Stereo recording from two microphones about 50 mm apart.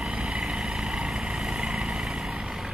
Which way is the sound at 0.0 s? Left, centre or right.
Right.